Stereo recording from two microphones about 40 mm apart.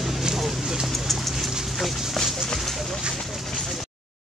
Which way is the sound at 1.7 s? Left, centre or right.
Centre.